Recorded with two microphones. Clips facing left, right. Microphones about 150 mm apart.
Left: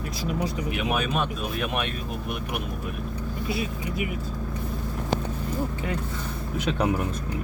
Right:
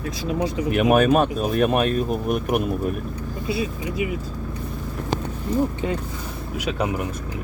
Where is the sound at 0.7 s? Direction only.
50° right (ahead or behind).